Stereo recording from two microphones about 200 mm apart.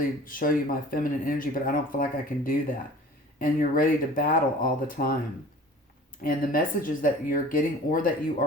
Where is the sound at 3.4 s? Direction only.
45° left (ahead or behind).